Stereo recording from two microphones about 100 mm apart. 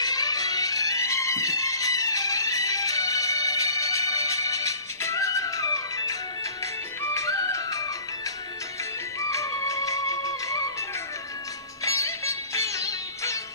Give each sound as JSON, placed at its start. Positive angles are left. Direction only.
{"t": 0.0, "sound": "music", "side_deg": 40}
{"t": 9.3, "sound": "music", "side_deg": 30}
{"t": 11.9, "sound": "music", "side_deg": 30}